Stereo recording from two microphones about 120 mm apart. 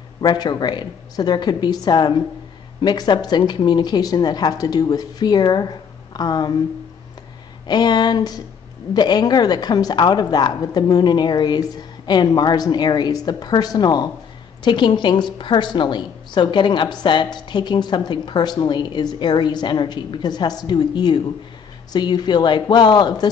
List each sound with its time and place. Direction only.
0.2 s a woman's voice: 35° left (ahead or behind)
7.6 s a woman's voice: 35° left (ahead or behind)